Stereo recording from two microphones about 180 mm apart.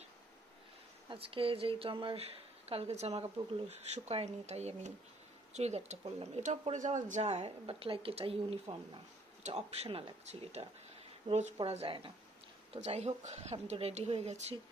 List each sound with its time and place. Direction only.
1.1 s speech: 30° right (ahead or behind)